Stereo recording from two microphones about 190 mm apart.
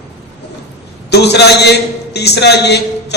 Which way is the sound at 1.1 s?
60° left (ahead or behind).